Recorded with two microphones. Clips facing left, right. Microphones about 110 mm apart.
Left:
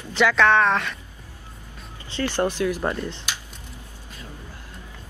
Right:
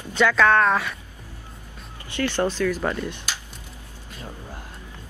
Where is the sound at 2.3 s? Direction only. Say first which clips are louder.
Left 1 dB; 15° left (ahead or behind).